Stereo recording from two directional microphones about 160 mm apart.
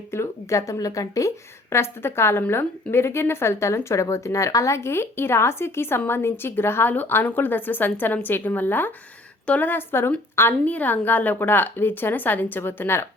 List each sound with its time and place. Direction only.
0.1 s a woman's voice: 20° left (ahead or behind)